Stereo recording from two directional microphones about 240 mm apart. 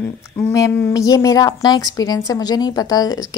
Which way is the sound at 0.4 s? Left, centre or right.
Centre.